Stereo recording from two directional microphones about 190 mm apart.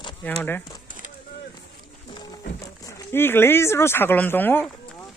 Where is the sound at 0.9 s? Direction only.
45° right (ahead or behind).